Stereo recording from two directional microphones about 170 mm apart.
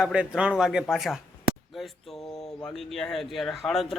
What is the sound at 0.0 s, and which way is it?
Speech, 5° right (ahead or behind).